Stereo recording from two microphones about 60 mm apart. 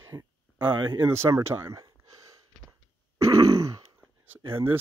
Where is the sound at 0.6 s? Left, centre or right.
Right.